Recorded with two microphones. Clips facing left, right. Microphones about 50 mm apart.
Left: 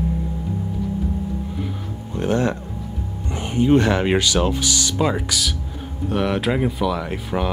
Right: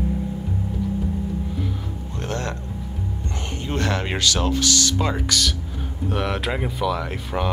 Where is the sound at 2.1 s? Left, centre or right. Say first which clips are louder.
Left 8 dB; centre.